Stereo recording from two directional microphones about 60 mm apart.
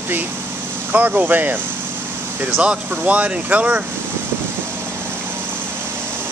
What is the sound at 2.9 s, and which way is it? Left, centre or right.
Speech, right.